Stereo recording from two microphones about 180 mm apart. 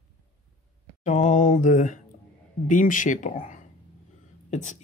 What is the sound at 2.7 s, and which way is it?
Speech, 45° left (ahead or behind).